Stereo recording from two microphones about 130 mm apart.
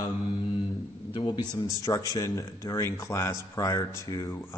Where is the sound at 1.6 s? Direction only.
25° left (ahead or behind).